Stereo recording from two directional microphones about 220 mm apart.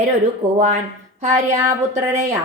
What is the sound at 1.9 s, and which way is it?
Speech, 30° right (ahead or behind).